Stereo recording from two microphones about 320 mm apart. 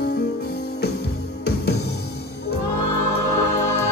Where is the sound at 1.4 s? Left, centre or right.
Left.